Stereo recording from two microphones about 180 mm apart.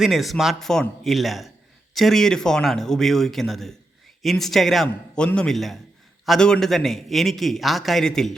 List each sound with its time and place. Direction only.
0.0 s a man's voice: centre (ahead or behind)